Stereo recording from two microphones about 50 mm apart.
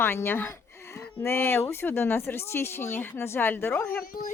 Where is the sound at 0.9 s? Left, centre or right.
Left.